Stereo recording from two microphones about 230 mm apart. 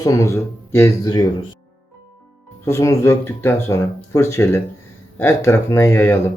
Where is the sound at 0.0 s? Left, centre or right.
Centre.